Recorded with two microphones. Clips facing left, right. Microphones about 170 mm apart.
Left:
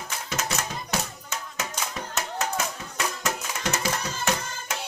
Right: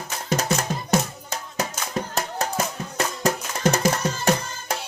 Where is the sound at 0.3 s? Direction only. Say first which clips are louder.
Right 8 dB; 45° right (ahead or behind).